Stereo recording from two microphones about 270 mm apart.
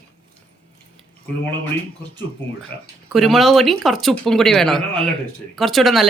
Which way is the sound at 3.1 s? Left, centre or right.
Centre.